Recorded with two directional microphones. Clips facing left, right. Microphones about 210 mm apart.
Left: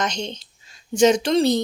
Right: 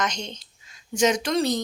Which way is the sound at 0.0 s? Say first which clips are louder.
Left 3 dB; 30° left (ahead or behind).